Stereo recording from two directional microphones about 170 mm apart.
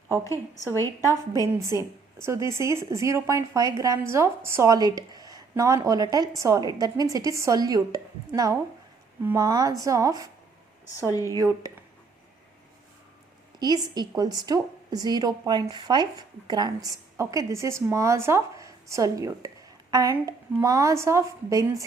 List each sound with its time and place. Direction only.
0.6 s a woman's voice: 15° left (ahead or behind)
1.5 s a woman's voice: 15° right (ahead or behind)
11.1 s speech: 20° left (ahead or behind)
11.3 s speech: 20° right (ahead or behind)
13.6 s speech: 25° right (ahead or behind)